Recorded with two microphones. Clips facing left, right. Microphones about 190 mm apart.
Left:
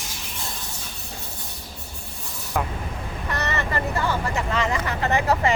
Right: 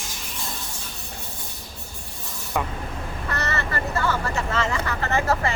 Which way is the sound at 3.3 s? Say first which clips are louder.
Left 2 dB; 15° left (ahead or behind).